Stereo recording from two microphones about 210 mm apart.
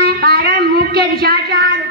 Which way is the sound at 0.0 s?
45° right (ahead or behind).